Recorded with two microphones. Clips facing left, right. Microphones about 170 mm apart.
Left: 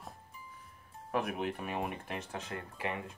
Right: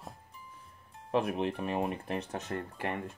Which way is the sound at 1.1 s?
30° right (ahead or behind).